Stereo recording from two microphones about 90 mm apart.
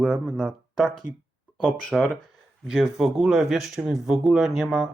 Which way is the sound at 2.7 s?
5° right (ahead or behind).